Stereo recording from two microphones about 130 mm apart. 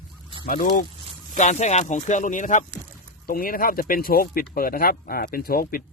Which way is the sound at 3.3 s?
90° left.